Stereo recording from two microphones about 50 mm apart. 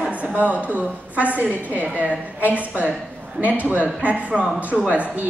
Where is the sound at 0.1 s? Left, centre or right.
Right.